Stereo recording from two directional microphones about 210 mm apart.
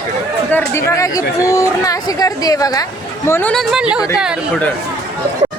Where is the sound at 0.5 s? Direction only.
15° left (ahead or behind); by 4.6 s 5° right (ahead or behind).